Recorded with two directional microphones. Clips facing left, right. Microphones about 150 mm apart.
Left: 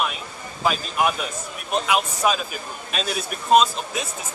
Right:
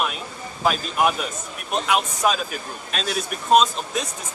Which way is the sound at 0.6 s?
Centre (ahead or behind).